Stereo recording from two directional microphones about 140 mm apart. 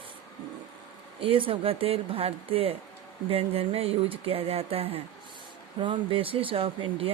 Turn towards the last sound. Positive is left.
turn(degrees=-40)  # may be behind; listen again after turning